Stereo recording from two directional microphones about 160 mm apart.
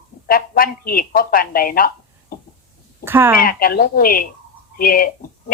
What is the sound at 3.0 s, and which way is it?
Speech, 15° right (ahead or behind).